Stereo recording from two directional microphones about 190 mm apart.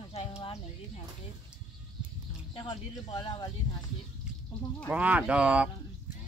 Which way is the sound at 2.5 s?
25° left (ahead or behind).